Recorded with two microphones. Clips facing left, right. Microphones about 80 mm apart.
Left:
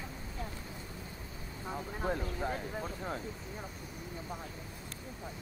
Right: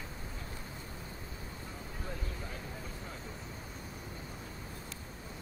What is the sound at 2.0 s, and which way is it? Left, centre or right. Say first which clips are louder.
Vehicle: left 10 dB; left.